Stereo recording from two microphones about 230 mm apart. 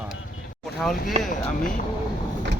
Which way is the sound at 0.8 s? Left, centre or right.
Centre.